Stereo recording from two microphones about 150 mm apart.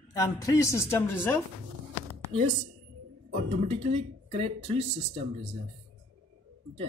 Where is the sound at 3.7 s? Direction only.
40° right (ahead or behind).